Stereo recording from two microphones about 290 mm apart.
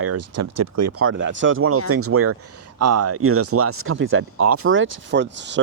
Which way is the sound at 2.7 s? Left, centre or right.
Right.